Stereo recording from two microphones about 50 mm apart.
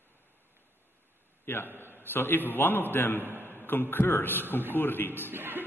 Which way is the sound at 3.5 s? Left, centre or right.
Left.